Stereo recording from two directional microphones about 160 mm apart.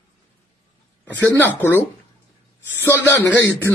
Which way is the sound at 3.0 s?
20° left (ahead or behind).